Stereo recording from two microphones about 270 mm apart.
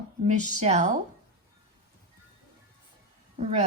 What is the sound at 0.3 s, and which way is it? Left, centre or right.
Speech, right.